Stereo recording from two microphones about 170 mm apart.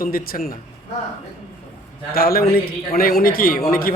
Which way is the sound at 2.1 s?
60° left (ahead or behind).